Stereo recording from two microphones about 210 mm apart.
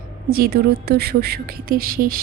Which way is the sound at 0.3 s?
45° right (ahead or behind).